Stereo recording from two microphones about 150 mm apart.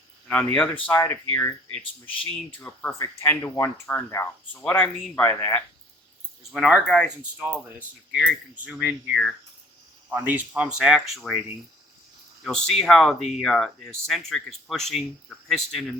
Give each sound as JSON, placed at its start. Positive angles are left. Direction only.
{"t": 0.3, "sound": "speech", "side_deg": 10}
{"t": 3.0, "sound": "speech", "side_deg": 20}
{"t": 6.5, "sound": "speech", "side_deg": 0}
{"t": 7.4, "sound": "speech", "side_deg": -10}
{"t": 12.4, "sound": "speech", "side_deg": 5}